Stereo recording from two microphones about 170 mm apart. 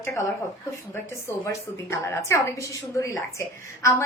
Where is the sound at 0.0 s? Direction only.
15° left (ahead or behind).